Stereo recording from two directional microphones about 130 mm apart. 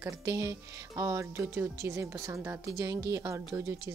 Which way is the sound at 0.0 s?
25° right (ahead or behind).